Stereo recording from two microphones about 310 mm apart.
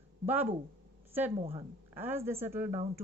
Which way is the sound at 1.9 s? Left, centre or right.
Centre.